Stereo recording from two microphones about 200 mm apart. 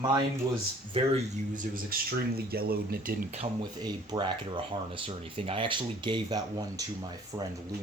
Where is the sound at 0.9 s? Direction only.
35° right (ahead or behind); by 3.2 s 50° right (ahead or behind).